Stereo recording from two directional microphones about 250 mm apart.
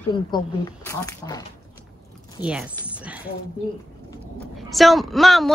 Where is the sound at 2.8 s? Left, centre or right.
Centre.